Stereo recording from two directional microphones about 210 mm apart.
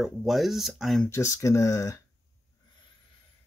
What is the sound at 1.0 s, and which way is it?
Speech, 15° left (ahead or behind).